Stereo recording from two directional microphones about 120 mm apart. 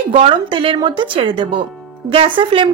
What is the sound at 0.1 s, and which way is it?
A woman's voice, 50° right (ahead or behind).